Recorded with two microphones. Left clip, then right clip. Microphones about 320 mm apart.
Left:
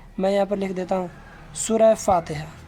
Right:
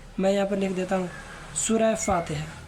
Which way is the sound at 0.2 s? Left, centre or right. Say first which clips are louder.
Left 3 dB; centre.